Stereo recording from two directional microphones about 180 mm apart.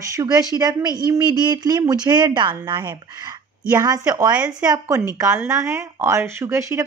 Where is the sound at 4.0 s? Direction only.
20° right (ahead or behind).